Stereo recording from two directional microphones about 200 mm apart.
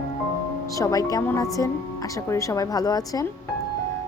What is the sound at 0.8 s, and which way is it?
A woman's voice, 15° left (ahead or behind).